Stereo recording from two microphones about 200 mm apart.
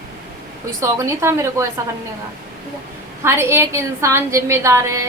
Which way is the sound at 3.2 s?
15° right (ahead or behind).